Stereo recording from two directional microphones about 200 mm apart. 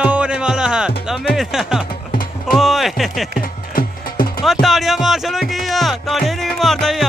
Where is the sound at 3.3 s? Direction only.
45° left (ahead or behind).